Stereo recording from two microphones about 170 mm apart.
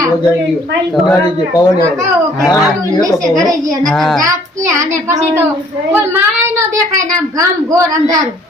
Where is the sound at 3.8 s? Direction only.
Centre (ahead or behind).